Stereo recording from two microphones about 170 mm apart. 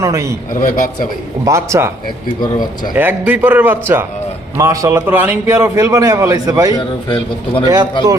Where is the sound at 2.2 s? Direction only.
30° left (ahead or behind).